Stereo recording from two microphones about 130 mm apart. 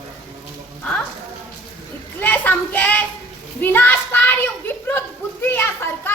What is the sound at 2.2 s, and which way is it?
A woman's voice, 15° left (ahead or behind).